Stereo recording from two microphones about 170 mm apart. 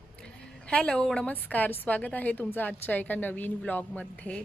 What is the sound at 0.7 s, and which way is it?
Speech, 5° left (ahead or behind).